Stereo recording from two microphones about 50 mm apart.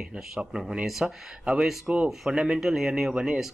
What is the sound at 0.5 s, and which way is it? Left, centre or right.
Speech, centre.